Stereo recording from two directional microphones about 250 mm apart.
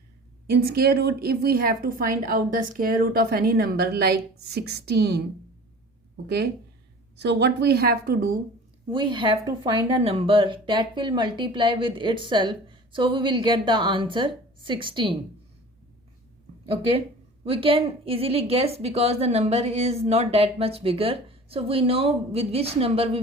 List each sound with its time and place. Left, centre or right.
0.4 s a woman's voice: right
6.2 s a woman's voice: right
8.9 s speech: centre
17.4 s speech: right